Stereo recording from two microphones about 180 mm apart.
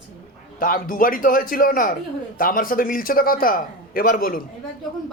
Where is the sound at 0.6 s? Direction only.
50° left (ahead or behind).